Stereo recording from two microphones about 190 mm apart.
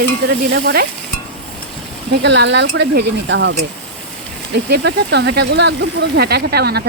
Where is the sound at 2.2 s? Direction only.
65° right (ahead or behind).